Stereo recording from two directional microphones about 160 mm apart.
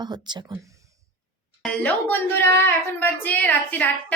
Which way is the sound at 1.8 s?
10° left (ahead or behind).